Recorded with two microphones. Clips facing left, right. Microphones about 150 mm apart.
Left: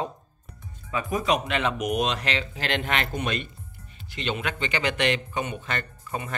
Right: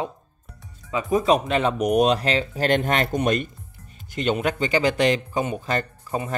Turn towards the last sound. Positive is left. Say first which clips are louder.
# right 5 dB
turn(degrees=-35)  # may be behind; listen again after turning